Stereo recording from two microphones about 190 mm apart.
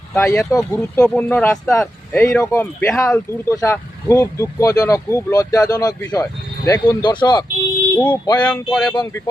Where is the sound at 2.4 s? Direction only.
15° left (ahead or behind).